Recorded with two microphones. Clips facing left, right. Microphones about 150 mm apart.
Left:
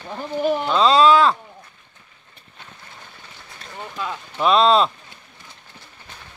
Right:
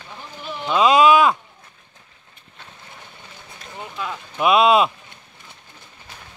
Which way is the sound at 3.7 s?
5° right (ahead or behind).